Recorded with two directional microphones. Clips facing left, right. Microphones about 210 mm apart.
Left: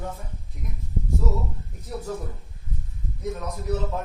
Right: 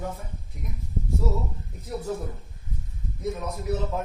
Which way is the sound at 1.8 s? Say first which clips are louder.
Right 1 dB; centre (ahead or behind).